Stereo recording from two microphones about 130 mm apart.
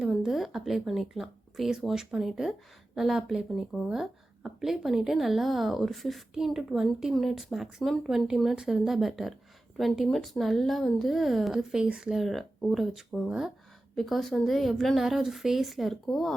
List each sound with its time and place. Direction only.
0.0 s a woman's voice: centre (ahead or behind)